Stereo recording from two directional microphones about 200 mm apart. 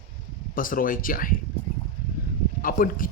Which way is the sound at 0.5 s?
45° left (ahead or behind).